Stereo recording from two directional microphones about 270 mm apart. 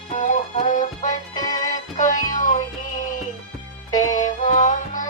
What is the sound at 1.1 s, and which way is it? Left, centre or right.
Music, centre.